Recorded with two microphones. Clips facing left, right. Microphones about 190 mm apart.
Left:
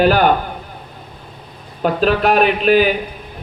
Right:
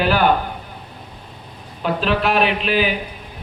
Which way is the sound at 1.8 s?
45° left (ahead or behind).